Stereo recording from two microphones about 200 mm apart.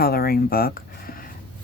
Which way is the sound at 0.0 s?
50° left (ahead or behind).